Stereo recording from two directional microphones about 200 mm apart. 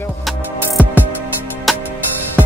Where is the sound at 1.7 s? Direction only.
Centre (ahead or behind).